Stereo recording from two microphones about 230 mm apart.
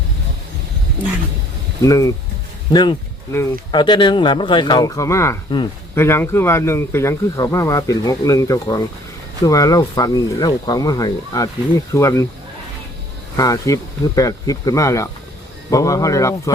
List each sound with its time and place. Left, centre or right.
1.8 s speech: centre
13.3 s speech: centre